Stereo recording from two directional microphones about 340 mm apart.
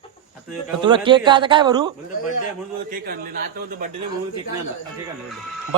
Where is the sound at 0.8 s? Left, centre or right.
Centre.